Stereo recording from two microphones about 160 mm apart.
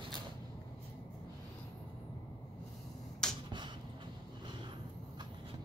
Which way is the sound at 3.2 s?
5° left (ahead or behind).